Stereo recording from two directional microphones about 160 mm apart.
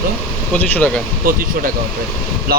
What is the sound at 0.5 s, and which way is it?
Speech, 10° left (ahead or behind).